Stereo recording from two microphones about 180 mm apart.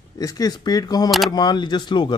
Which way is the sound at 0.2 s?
20° left (ahead or behind).